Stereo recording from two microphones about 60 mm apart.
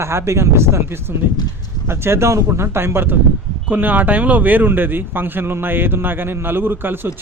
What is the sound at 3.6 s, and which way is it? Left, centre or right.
Speech, right.